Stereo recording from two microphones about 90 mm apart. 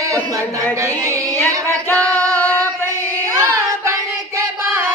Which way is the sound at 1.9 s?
15° left (ahead or behind).